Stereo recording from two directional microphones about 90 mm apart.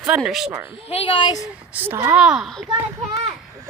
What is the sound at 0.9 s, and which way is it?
Speech, 80° left.